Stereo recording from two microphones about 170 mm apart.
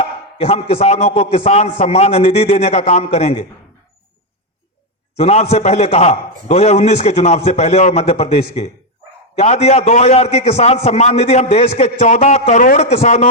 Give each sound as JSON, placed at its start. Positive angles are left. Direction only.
{"t": 0.0, "sound": "a man's voice", "side_deg": 35}
{"t": 5.1, "sound": "a man's voice", "side_deg": 40}